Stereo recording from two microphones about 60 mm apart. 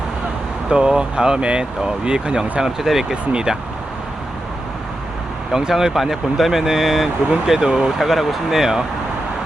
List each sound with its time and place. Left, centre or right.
0.7 s speech: centre
5.5 s speech: centre